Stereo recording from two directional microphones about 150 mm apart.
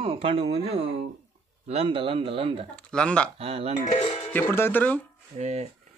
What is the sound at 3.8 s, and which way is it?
Speech, 45° left (ahead or behind).